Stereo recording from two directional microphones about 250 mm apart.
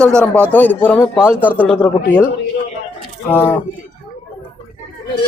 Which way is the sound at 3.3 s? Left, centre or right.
Centre.